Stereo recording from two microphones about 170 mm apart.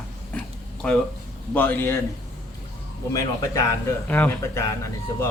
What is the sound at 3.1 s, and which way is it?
Speech, 20° left (ahead or behind).